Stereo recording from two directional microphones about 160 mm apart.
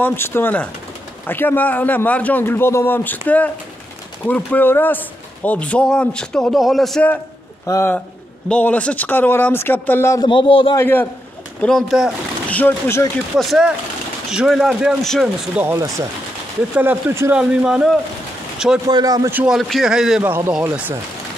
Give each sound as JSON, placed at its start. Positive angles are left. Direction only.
{"t": 0.0, "sound": "a man's voice", "side_deg": 15}
{"t": 7.6, "sound": "a man's voice", "side_deg": 15}
{"t": 10.2, "sound": "a man's voice", "side_deg": 30}
{"t": 10.8, "sound": "a man's voice", "side_deg": 10}
{"t": 11.6, "sound": "a man's voice", "side_deg": 0}
{"t": 13.4, "sound": "a man's voice", "side_deg": 0}
{"t": 15.6, "sound": "a man's voice", "side_deg": -20}
{"t": 18.9, "sound": "speech", "side_deg": -25}
{"t": 19.3, "sound": "a man's voice", "side_deg": -5}
{"t": 20.2, "sound": "speech", "side_deg": -15}